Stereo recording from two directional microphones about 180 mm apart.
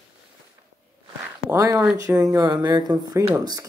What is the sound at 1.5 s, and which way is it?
Speech, 15° right (ahead or behind).